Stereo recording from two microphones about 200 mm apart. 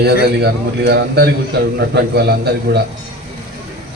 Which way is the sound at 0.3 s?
55° right (ahead or behind).